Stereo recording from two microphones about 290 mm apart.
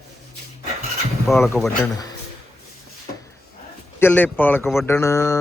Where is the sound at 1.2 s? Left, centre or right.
Centre.